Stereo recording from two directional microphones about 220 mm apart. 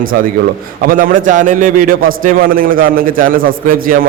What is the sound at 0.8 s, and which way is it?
A man's voice, 40° right (ahead or behind).